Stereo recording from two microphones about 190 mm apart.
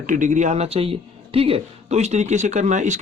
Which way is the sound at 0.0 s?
40° right (ahead or behind).